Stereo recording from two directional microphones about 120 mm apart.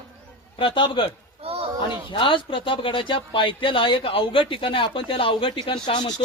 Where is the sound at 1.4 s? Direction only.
50° right (ahead or behind).